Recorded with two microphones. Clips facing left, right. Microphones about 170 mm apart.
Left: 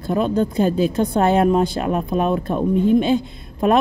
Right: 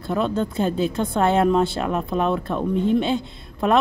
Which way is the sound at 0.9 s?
20° left (ahead or behind).